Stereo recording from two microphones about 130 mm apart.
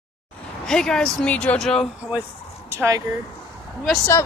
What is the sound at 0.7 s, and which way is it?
Speech, 5° left (ahead or behind).